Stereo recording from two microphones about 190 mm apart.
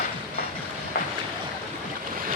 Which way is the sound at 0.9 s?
50° left (ahead or behind).